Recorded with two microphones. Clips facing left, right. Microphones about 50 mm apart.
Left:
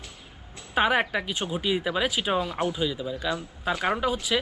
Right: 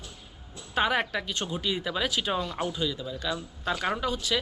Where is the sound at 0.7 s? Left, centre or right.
Centre.